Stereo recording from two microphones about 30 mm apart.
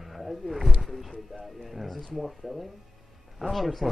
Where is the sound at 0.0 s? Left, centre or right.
Centre.